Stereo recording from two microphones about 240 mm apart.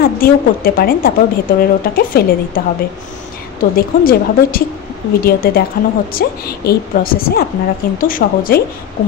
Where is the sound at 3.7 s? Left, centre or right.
Left.